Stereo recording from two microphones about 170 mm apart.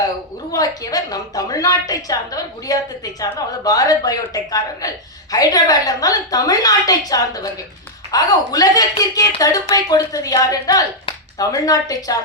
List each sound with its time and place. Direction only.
0.5 s a woman's voice: 20° left (ahead or behind)